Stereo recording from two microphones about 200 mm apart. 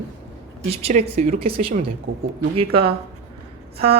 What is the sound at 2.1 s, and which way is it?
Speech, 55° right (ahead or behind).